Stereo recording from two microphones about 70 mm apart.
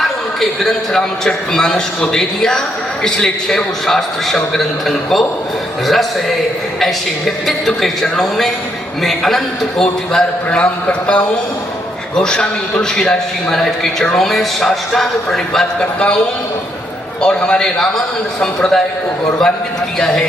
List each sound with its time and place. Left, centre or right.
0.3 s a man's voice: centre
17.2 s a man's voice: centre
20.0 s a man's voice: centre